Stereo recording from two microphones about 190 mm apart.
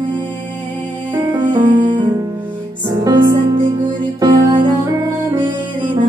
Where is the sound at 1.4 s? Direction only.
25° right (ahead or behind).